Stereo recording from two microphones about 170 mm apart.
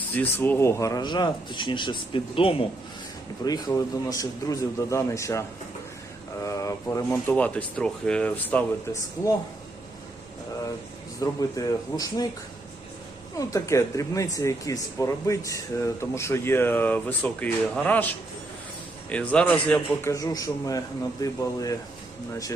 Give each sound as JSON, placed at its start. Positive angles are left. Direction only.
{"t": 0.1, "sound": "speech", "side_deg": 10}
{"t": 3.4, "sound": "speech", "side_deg": 20}
{"t": 11.2, "sound": "speech", "side_deg": 20}
{"t": 13.3, "sound": "speech", "side_deg": 20}
{"t": 19.1, "sound": "speech", "side_deg": 5}
{"t": 20.1, "sound": "speech", "side_deg": 20}